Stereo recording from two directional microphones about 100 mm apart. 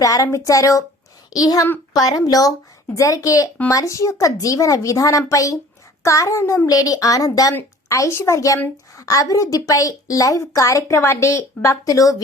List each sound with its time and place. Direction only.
0.0 s a woman's voice: 35° left (ahead or behind)